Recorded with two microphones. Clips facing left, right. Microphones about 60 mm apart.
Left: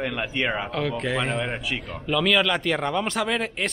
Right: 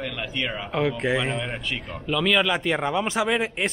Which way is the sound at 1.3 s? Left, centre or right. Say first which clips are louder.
Left 2 dB; centre.